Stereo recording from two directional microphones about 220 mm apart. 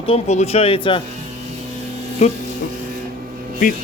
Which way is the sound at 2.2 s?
30° left (ahead or behind).